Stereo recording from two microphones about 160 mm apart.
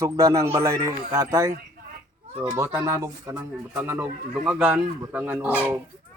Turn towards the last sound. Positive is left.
turn(degrees=-10)  # may be behind; listen again after turning